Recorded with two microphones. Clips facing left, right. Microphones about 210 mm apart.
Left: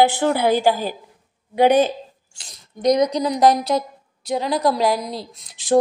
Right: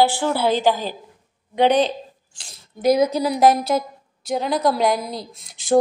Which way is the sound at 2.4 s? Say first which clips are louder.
Even; 5° right (ahead or behind).